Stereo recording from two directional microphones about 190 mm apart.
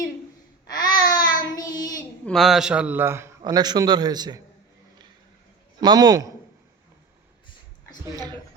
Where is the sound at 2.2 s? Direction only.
Centre (ahead or behind); by 4.4 s 20° right (ahead or behind).